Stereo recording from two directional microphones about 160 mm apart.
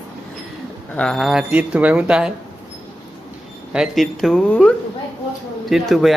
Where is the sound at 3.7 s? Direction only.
5° right (ahead or behind).